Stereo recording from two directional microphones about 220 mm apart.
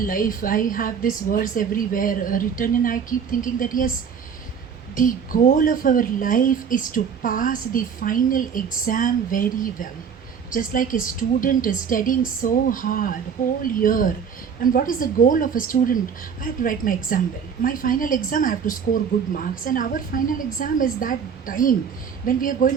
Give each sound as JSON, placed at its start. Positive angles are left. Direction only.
{"t": 0.1, "sound": "a woman's voice", "side_deg": 40}
{"t": 4.9, "sound": "a woman's voice", "side_deg": 40}